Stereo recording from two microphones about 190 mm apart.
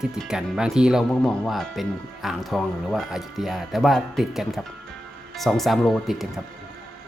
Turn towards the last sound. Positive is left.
turn(degrees=0)  # may be behind; listen again after turning